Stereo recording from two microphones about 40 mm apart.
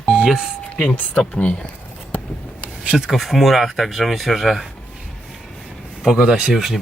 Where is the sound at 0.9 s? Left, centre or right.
Left.